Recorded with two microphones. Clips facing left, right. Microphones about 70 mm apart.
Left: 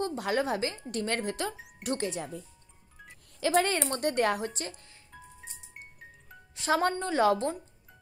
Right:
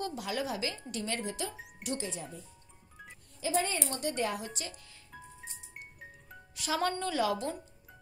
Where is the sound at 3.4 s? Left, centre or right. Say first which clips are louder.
Left 6 dB; left.